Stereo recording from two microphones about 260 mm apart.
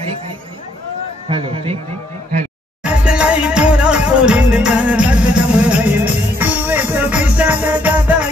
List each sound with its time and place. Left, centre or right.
1.3 s a man's voice: right
2.8 s music: centre